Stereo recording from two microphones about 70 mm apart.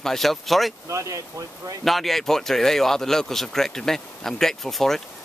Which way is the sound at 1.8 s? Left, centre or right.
Centre.